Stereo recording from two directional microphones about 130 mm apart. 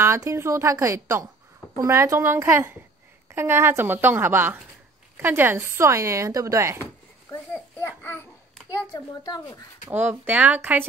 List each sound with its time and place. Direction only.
0.0 s a woman's voice: 20° right (ahead or behind)
6.8 s a sound: 20° left (ahead or behind)
8.0 s babbling: 15° left (ahead or behind)
9.8 s a woman's voice: 15° right (ahead or behind)